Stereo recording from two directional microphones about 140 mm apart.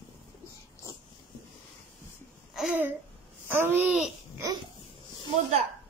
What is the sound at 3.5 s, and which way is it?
Speech, 15° right (ahead or behind).